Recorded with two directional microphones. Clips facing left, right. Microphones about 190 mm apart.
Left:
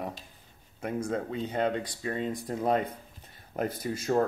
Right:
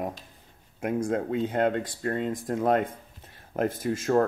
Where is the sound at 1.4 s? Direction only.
50° right (ahead or behind).